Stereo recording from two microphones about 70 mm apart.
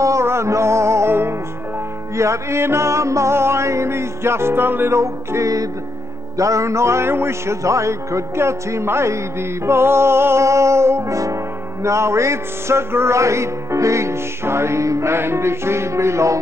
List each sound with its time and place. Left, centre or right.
0.0 s music: right